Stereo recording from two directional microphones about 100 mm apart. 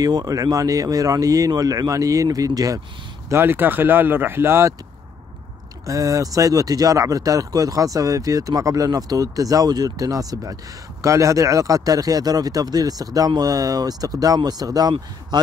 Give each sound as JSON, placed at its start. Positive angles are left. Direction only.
{"t": 0.0, "sound": "speech", "side_deg": -40}
{"t": 3.3, "sound": "speech", "side_deg": -25}
{"t": 5.9, "sound": "speech", "side_deg": -35}